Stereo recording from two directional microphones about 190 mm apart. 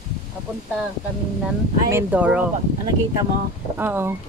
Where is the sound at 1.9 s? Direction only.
10° right (ahead or behind).